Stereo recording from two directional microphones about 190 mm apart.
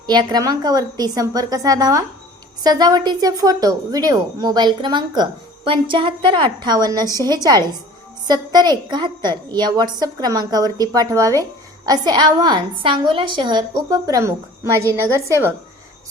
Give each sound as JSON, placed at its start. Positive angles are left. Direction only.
{"t": 0.1, "sound": "a woman's voice", "side_deg": -20}